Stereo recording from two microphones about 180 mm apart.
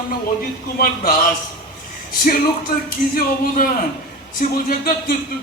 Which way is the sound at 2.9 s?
55° left (ahead or behind).